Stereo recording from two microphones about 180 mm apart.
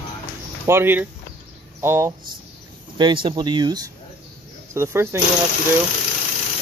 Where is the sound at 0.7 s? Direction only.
10° right (ahead or behind).